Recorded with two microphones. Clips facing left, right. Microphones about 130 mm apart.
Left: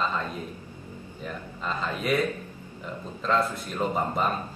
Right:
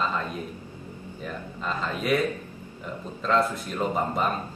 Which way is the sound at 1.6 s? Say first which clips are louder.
Right 1 dB; centre (ahead or behind).